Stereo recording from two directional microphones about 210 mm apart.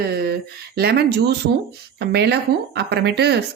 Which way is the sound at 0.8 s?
50° right (ahead or behind).